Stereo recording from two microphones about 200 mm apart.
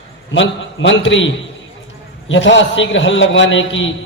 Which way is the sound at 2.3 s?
65° left (ahead or behind).